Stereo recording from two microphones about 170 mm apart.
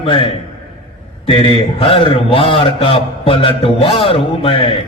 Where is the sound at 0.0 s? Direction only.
30° left (ahead or behind).